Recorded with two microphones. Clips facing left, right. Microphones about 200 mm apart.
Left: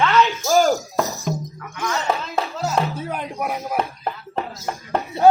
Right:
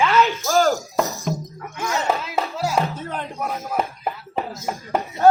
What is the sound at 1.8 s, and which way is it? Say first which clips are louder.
Speech: even; 10° right (ahead or behind).